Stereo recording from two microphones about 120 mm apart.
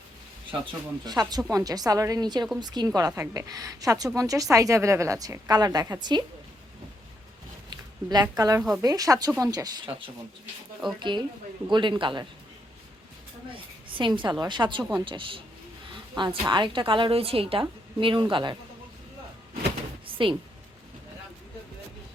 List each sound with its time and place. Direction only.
0.6 s a woman's voice: 40° right (ahead or behind)
7.7 s a woman's voice: 35° right (ahead or behind)
13.5 s a woman's voice: 45° right (ahead or behind)
20.1 s a sound: 45° right (ahead or behind)